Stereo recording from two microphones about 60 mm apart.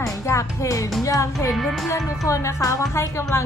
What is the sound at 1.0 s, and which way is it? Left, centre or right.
Speech, left.